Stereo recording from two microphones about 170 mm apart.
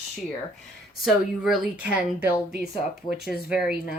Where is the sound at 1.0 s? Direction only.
Centre (ahead or behind).